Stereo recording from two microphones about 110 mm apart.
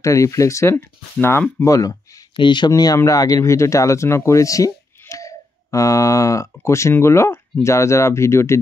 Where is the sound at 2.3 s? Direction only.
45° left (ahead or behind).